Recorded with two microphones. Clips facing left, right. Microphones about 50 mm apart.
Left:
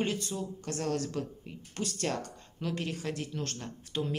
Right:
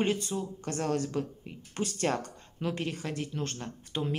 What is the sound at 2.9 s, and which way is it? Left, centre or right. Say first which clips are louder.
Speech: right 1 dB; centre.